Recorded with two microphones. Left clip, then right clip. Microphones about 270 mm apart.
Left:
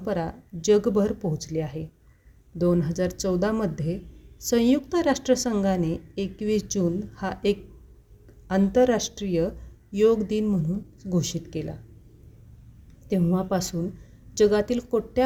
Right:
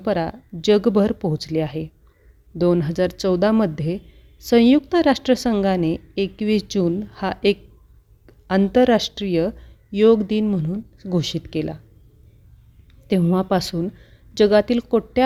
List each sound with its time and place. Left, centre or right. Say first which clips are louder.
0.0 s speech: right 6 dB; right
13.1 s speech: right 6 dB; right